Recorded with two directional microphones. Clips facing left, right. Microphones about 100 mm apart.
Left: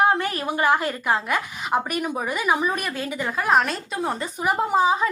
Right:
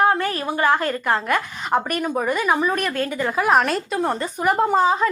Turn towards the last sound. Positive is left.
turn(degrees=5)  # may be behind; listen again after turning